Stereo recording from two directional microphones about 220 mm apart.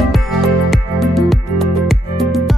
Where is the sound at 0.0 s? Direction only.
Centre (ahead or behind).